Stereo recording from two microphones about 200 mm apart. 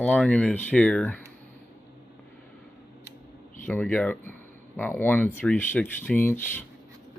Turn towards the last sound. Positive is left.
turn(degrees=10)  # may be behind; listen again after turning